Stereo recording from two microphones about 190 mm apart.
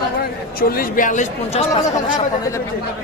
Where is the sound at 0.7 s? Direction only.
50° left (ahead or behind).